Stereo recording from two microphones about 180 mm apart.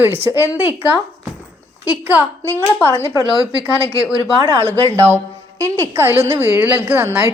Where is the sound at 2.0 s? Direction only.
10° right (ahead or behind).